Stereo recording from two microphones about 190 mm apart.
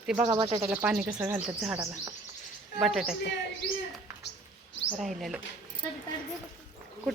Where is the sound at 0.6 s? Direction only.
10° right (ahead or behind).